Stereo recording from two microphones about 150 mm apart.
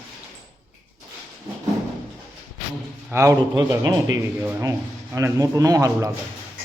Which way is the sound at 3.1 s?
20° right (ahead or behind).